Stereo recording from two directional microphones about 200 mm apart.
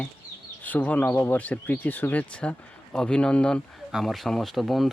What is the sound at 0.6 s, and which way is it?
Speech, 10° left (ahead or behind).